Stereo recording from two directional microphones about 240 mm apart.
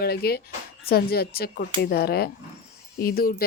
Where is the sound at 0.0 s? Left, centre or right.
Left.